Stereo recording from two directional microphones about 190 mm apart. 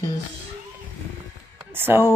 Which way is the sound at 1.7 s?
10° right (ahead or behind).